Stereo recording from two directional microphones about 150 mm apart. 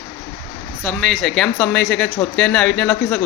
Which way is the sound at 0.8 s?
5° left (ahead or behind).